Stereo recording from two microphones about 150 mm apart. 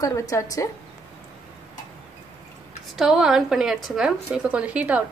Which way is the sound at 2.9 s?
5° right (ahead or behind).